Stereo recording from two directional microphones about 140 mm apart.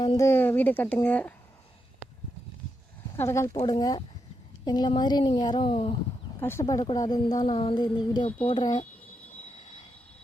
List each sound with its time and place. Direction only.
0.2 s speech: 15° left (ahead or behind)
3.2 s speech: 20° left (ahead or behind)
3.7 s a woman's voice: 30° left (ahead or behind)
6.4 s a woman's voice: 20° left (ahead or behind)